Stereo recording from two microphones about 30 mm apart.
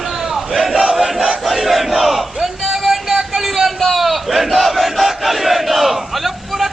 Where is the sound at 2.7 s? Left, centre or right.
Centre.